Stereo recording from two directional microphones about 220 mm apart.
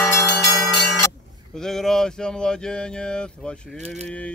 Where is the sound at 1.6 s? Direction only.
Centre (ahead or behind).